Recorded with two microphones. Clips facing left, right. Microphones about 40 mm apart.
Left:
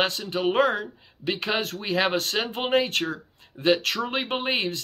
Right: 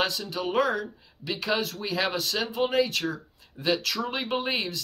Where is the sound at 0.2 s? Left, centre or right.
Left.